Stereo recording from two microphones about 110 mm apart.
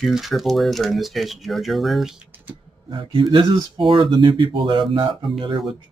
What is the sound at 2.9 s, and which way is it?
Speech, 50° right (ahead or behind).